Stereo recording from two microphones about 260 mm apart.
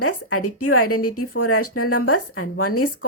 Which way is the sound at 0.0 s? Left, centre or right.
Left.